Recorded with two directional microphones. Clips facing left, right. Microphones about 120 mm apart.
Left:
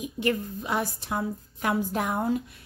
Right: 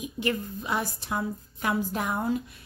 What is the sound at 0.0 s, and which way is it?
Speech, 50° left (ahead or behind).